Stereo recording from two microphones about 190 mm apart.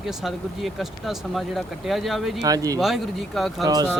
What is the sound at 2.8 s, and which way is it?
Speech, centre (ahead or behind).